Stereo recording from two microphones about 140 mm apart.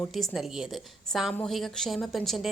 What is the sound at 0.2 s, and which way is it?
A woman's voice, 5° right (ahead or behind).